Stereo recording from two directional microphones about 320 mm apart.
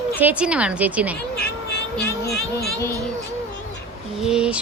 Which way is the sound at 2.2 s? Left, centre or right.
Left.